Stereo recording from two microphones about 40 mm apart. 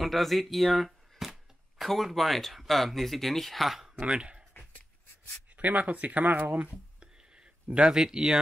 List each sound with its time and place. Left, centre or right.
0.0 s a sound: centre
1.9 s speech: centre
4.1 s speech: right
5.6 s speech: right
7.0 s a sound: right
7.7 s speech: centre